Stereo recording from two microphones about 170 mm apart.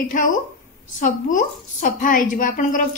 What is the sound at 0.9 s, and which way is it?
A woman's voice, 50° left (ahead or behind).